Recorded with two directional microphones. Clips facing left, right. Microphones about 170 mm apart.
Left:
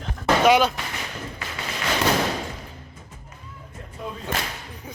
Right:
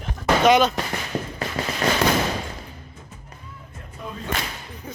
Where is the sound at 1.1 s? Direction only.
40° right (ahead or behind).